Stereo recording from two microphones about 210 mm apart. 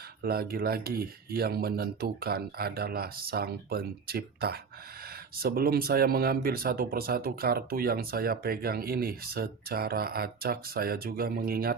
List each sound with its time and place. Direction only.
0.2 s speech: 45° right (ahead or behind)